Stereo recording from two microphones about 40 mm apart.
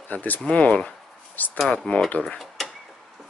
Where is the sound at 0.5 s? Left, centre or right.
Left.